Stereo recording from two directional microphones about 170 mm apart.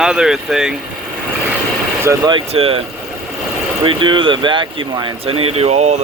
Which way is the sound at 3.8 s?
30° right (ahead or behind).